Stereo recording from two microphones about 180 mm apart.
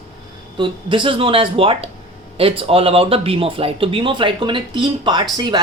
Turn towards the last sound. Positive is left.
turn(degrees=-25)  # may be behind; listen again after turning